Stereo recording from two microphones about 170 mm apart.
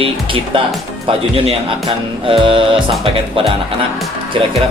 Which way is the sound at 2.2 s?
30° right (ahead or behind).